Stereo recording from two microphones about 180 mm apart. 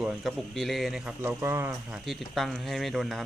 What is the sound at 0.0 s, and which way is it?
A man's voice, 5° right (ahead or behind).